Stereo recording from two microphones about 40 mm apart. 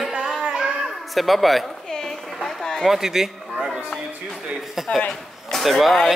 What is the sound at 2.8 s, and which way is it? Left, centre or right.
Speech, centre.